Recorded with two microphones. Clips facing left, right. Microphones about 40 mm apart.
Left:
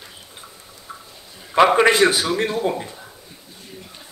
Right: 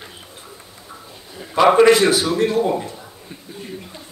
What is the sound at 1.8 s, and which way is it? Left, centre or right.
Speech, left.